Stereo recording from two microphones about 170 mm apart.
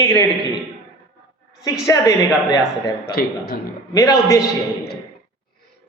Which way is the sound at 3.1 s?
65° left (ahead or behind).